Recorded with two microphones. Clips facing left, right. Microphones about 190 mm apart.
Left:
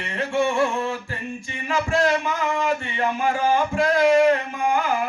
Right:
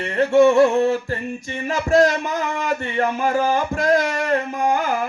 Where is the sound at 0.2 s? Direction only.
40° right (ahead or behind).